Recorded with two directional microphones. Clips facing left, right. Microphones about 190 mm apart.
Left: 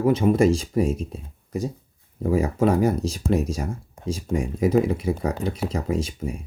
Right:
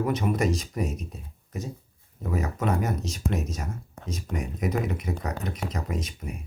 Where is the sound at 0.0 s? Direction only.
30° left (ahead or behind).